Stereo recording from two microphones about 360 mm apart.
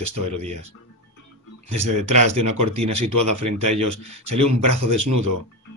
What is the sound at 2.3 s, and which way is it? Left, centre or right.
Speech, right.